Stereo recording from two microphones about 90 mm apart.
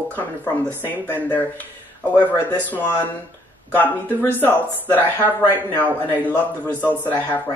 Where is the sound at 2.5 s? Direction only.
20° left (ahead or behind).